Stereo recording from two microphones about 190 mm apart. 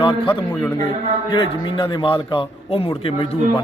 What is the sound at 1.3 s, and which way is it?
A man's voice, 25° left (ahead or behind).